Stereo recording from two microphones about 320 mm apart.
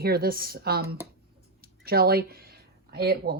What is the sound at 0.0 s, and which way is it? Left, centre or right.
Speech, right.